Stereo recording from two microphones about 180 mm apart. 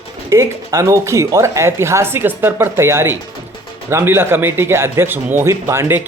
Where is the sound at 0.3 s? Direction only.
15° right (ahead or behind).